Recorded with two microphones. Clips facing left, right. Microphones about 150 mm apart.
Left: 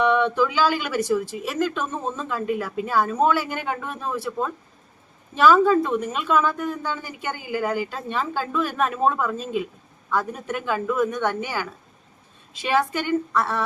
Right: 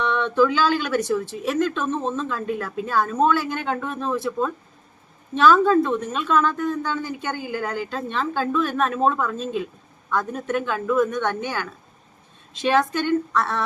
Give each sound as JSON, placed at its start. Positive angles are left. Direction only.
{"t": 0.0, "sound": "speech", "side_deg": 10}